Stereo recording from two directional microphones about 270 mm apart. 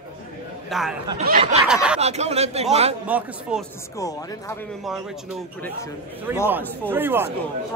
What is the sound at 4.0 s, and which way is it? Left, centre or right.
Speech, centre.